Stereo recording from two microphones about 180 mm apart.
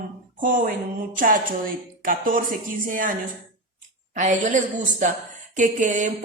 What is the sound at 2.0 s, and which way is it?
A woman's voice, 50° right (ahead or behind).